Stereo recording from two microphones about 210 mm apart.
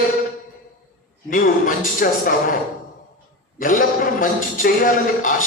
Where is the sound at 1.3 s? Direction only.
40° left (ahead or behind).